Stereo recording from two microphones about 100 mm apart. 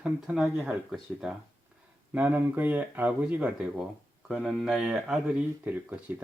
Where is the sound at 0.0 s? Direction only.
10° right (ahead or behind).